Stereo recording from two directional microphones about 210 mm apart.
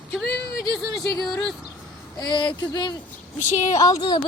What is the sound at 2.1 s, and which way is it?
Speech, 20° left (ahead or behind).